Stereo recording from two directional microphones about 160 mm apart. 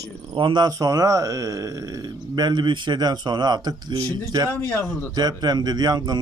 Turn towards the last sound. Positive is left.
turn(degrees=-25)  # may be behind; listen again after turning